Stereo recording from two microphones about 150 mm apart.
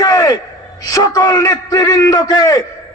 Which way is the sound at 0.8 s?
25° left (ahead or behind).